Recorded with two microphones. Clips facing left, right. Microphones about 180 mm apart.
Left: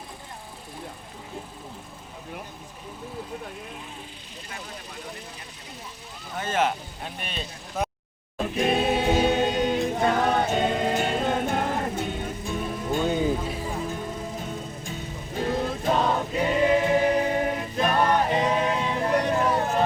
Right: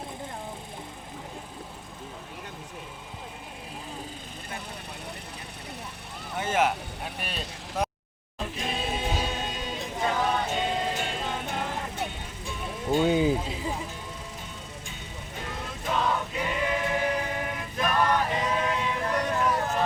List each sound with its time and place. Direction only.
6.6 s speech: 5° right (ahead or behind)
8.5 s choir: 60° left (ahead or behind)
12.9 s music: 10° right (ahead or behind)
15.4 s choir: 35° left (ahead or behind)
18.3 s a sound: 25° left (ahead or behind)